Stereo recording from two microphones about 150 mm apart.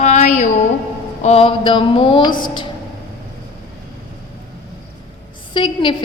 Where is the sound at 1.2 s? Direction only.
40° left (ahead or behind).